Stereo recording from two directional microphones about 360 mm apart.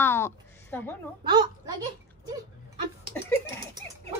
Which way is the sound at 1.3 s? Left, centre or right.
Centre.